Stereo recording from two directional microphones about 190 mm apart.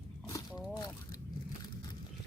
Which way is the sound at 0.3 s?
20° left (ahead or behind).